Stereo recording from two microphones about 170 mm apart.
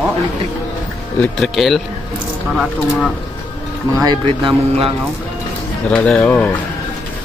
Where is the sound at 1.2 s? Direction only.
Centre (ahead or behind).